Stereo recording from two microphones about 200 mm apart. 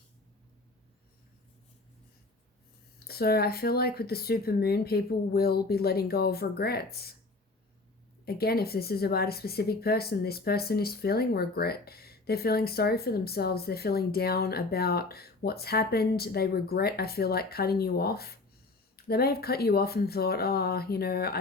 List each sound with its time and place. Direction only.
3.1 s speech: 50° left (ahead or behind)
8.2 s speech: 50° left (ahead or behind)